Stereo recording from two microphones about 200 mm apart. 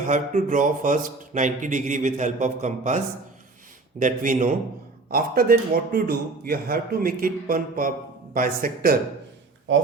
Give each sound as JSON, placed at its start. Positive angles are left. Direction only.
{"t": 0.0, "sound": "a man's voice", "side_deg": -40}
{"t": 4.0, "sound": "a man's voice", "side_deg": -40}